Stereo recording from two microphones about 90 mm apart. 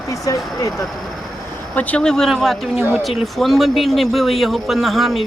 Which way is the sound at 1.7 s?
15° left (ahead or behind).